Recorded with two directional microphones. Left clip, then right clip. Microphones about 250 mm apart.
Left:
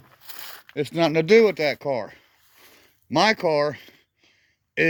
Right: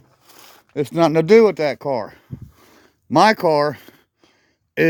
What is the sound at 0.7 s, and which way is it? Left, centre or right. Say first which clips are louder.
Speech: right 5 dB; right.